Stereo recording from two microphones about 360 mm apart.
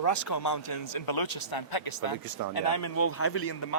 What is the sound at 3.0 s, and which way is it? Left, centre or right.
Speech, left.